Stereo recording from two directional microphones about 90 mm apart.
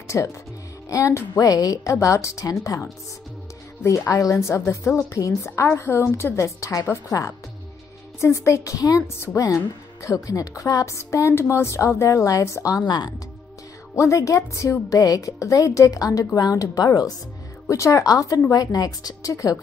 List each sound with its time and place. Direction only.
0.1 s a woman's voice: 35° left (ahead or behind)
4.2 s a woman's voice: 35° left (ahead or behind)
12.8 s a woman's voice: 50° left (ahead or behind)
13.9 s a woman's voice: 35° left (ahead or behind)
17.6 s a woman's voice: 35° left (ahead or behind)